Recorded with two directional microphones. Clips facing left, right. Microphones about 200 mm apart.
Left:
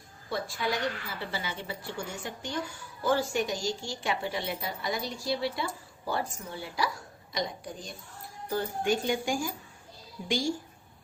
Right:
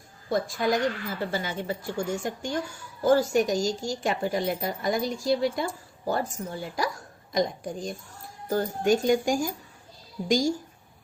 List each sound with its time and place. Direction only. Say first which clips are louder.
0.3 s a woman's voice: right 7 dB; 45° right (ahead or behind)